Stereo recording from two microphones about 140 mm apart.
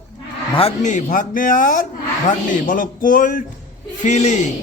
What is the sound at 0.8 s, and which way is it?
A man's voice, 60° left (ahead or behind).